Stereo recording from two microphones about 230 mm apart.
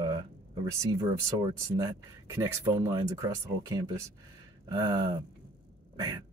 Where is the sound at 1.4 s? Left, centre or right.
Centre.